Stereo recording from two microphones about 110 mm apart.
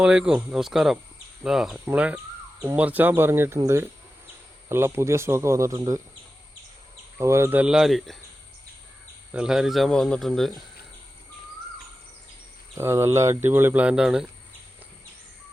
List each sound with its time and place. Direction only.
0.0 s speech: 10° right (ahead or behind)
1.8 s a sound: 15° right (ahead or behind)
2.7 s speech: 15° right (ahead or behind)
7.2 s speech: 25° right (ahead or behind)
7.6 s speech: centre (ahead or behind)
9.3 s speech: 5° right (ahead or behind)
12.7 s speech: 25° right (ahead or behind); by 14.3 s 5° right (ahead or behind)